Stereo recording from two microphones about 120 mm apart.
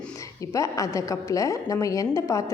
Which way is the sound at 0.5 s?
25° left (ahead or behind).